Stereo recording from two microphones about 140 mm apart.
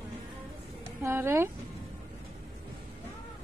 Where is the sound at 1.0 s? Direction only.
20° right (ahead or behind).